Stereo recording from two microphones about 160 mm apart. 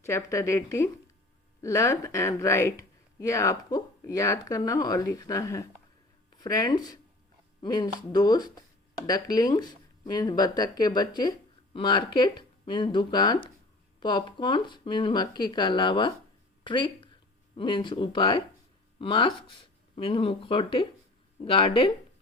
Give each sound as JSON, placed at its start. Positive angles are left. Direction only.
{"t": 0.0, "sound": "speech", "side_deg": 20}